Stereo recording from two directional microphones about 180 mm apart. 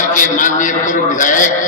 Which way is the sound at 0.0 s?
45° left (ahead or behind).